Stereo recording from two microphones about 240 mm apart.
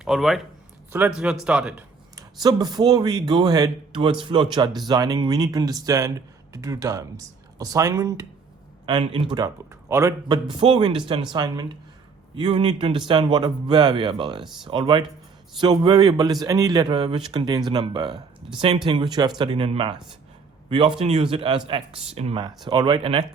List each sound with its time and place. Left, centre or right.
0.0 s speech: centre
2.1 s a man's voice: centre